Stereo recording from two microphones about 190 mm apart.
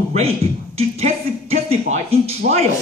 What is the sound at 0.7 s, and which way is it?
A man's voice, 30° right (ahead or behind).